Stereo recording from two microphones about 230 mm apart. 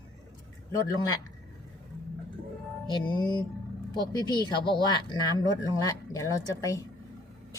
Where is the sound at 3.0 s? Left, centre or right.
Centre.